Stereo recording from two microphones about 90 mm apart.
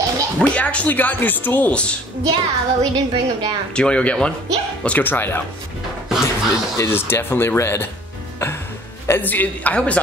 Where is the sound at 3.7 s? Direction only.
10° left (ahead or behind).